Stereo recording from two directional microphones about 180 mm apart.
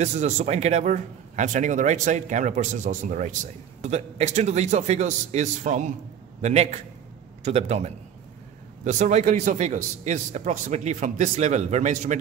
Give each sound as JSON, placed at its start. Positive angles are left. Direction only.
{"t": 0.0, "sound": "a man's voice", "side_deg": -40}